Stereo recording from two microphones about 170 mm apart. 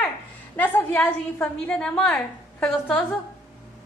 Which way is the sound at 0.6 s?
10° left (ahead or behind).